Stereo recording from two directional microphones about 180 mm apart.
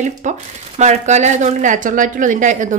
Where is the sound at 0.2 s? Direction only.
40° right (ahead or behind).